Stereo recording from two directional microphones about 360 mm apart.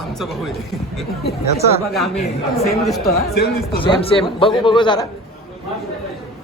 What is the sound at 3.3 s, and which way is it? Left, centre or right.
Speech, left.